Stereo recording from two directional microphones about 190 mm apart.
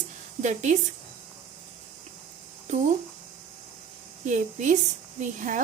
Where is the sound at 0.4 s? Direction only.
40° right (ahead or behind).